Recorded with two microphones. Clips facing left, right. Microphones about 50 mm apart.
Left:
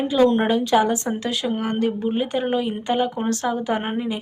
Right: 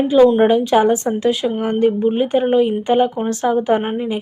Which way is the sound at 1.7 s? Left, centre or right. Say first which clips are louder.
Right 10 dB; right.